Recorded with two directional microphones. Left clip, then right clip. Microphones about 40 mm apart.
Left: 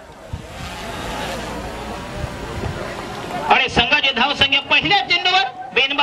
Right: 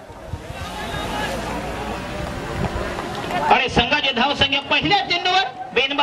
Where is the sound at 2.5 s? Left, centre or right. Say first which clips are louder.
Right 2 dB; left.